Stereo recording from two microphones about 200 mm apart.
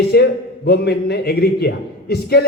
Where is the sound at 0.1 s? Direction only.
55° left (ahead or behind).